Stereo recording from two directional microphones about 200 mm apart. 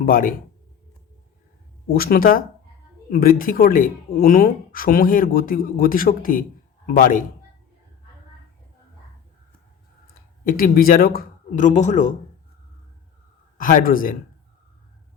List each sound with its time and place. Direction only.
0.0 s speech: 45° left (ahead or behind)
1.9 s speech: 50° left (ahead or behind)
10.2 s speech: 45° left (ahead or behind)
13.6 s speech: 40° left (ahead or behind)